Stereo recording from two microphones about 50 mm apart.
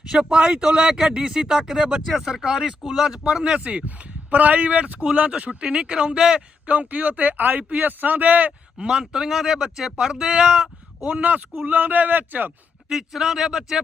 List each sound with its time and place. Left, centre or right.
0.1 s speech: centre
3.1 s speech: centre
3.8 s speech: right; by 6.4 s centre
6.7 s speech: right
8.8 s speech: centre; by 12.5 s right
12.9 s speech: centre